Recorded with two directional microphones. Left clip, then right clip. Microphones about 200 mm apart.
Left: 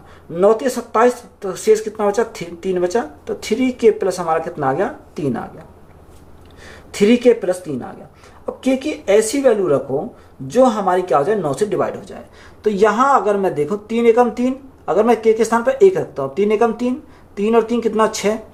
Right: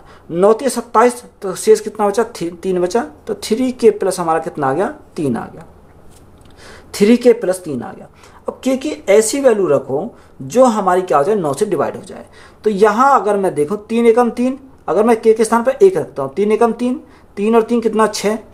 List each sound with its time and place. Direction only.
0.3 s speech: 40° right (ahead or behind)
6.9 s a woman's voice: 40° right (ahead or behind)